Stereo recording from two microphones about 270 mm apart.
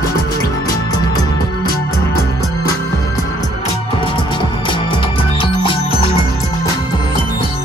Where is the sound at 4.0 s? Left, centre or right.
Centre.